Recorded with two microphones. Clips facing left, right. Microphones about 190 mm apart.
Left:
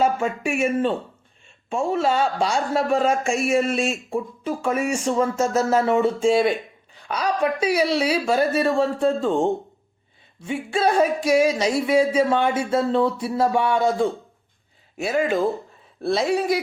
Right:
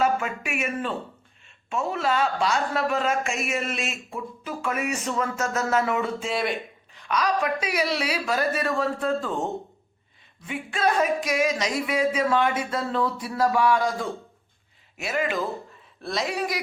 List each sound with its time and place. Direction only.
0.0 s speech: 30° left (ahead or behind)